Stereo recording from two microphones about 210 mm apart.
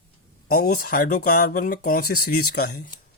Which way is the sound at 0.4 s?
45° left (ahead or behind).